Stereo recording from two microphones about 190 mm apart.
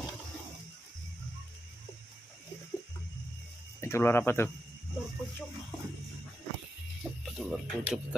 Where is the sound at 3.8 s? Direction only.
15° left (ahead or behind).